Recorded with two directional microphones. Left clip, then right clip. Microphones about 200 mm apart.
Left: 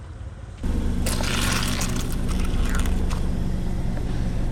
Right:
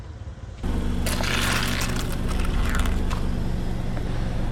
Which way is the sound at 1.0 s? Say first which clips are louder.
Right 1 dB; centre (ahead or behind).